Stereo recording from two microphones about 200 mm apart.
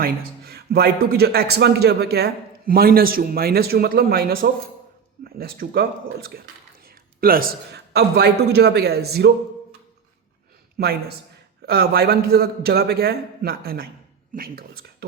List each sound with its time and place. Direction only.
0.0 s a man's voice: 50° right (ahead or behind)
10.8 s speech: 50° right (ahead or behind)